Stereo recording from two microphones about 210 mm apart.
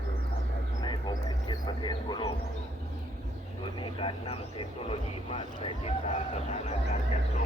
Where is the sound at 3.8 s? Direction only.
25° left (ahead or behind).